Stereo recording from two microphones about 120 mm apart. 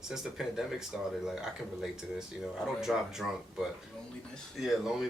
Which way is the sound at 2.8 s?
5° right (ahead or behind).